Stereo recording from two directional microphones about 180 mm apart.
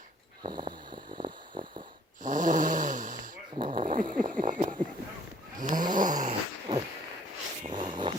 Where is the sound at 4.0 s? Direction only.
50° right (ahead or behind).